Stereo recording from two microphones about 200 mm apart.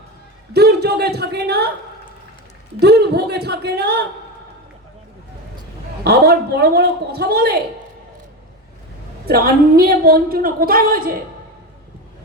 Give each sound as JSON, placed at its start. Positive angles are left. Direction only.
{"t": 0.5, "sound": "a man's voice", "side_deg": -55}
{"t": 2.8, "sound": "a man's voice", "side_deg": -55}
{"t": 6.1, "sound": "a woman's voice", "side_deg": -55}
{"t": 9.2, "sound": "a woman's voice", "side_deg": -50}